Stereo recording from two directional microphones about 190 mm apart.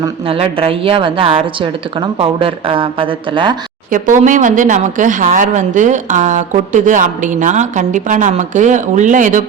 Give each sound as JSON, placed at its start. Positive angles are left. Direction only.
{"t": 0.0, "sound": "a woman's voice", "side_deg": -30}
{"t": 3.9, "sound": "speech", "side_deg": -45}